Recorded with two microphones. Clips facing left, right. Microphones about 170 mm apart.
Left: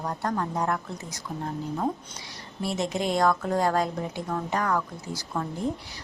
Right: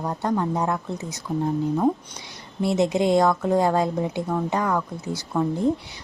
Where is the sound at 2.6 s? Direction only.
25° right (ahead or behind).